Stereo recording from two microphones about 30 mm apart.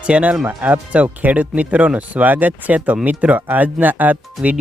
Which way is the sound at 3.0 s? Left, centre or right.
Right.